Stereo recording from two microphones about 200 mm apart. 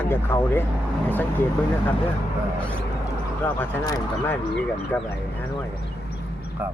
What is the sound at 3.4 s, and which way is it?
Speech, 10° left (ahead or behind).